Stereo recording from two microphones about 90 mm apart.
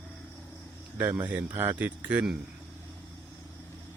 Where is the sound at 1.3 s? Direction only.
20° right (ahead or behind).